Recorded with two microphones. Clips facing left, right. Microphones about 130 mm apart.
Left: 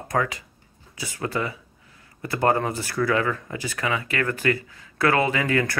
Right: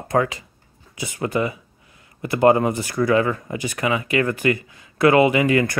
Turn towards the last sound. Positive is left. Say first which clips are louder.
# right 6 dB
turn(degrees=-15)  # may be behind; listen again after turning